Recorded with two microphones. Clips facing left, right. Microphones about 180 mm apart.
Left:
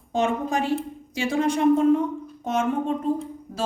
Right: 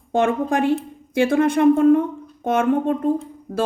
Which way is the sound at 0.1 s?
55° right (ahead or behind).